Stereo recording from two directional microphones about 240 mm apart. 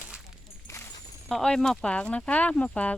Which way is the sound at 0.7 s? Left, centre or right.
Centre.